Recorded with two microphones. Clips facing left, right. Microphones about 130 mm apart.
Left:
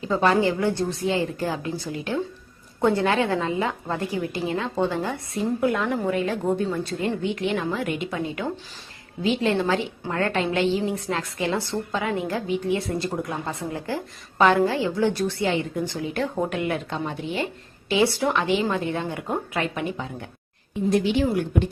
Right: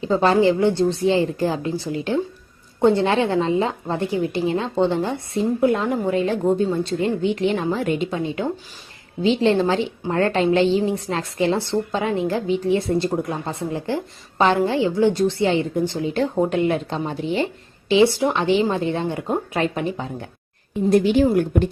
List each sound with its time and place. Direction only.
0.0 s a woman's voice: 30° right (ahead or behind)
20.9 s a woman's voice: 45° right (ahead or behind)